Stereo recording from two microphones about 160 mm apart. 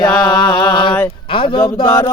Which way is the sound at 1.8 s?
30° left (ahead or behind).